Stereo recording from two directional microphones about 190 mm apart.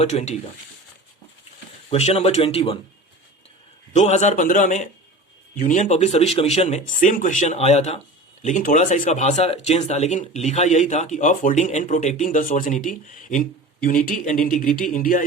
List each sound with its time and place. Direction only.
0.0 s speech: 35° left (ahead or behind)
1.9 s speech: 30° left (ahead or behind)
3.9 s speech: 35° left (ahead or behind)